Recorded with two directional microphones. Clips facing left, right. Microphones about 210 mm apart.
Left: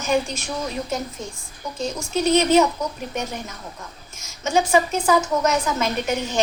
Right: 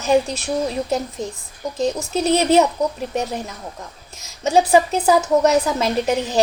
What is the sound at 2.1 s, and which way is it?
Speech, 35° right (ahead or behind).